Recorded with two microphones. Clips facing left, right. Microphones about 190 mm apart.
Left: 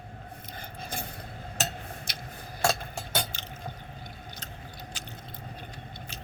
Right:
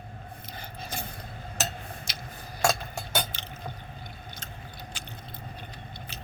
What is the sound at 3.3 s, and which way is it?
Squish, 50° left (ahead or behind).